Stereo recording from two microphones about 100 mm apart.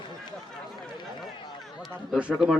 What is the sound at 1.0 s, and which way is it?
Run, 50° left (ahead or behind).